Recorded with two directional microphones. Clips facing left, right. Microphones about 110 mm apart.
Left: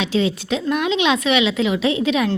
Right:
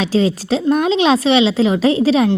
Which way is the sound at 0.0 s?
35° right (ahead or behind).